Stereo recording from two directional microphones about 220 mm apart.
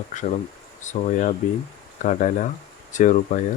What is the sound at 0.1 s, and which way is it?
Speech, 35° left (ahead or behind).